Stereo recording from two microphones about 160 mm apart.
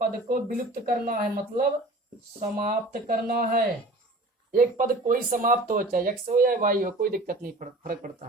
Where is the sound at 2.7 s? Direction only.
60° right (ahead or behind).